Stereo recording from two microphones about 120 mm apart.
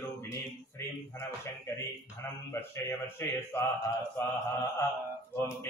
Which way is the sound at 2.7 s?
25° left (ahead or behind).